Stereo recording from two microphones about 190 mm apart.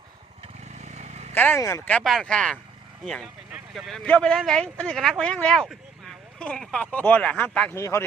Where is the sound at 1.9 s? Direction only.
5° left (ahead or behind).